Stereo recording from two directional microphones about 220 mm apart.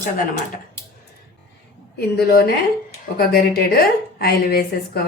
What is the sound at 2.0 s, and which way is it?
A woman's voice, 45° left (ahead or behind).